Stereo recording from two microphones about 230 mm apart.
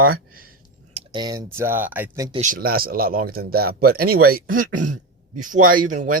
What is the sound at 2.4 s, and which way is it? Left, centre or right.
Speech, right.